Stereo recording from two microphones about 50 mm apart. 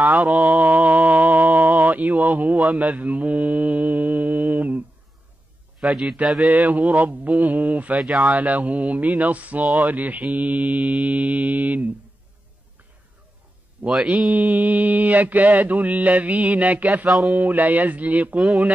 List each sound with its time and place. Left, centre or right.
0.0 s mantra: right
5.8 s a man's voice: centre
6.4 s mantra: right
8.0 s speech: centre
8.4 s mantra: right
13.8 s speech: right
14.3 s mantra: right